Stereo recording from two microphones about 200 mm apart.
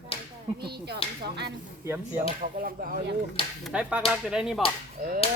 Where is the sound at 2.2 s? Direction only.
45° right (ahead or behind).